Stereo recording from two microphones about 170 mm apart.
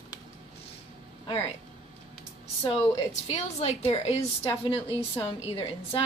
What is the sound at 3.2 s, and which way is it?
A woman's voice, 40° left (ahead or behind).